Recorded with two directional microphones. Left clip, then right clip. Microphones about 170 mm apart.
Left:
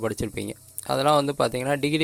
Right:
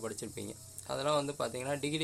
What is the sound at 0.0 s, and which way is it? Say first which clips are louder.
Speech: left 12 dB; 45° left (ahead or behind).